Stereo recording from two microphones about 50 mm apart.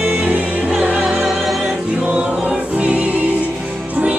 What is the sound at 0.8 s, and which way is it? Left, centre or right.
Music, centre.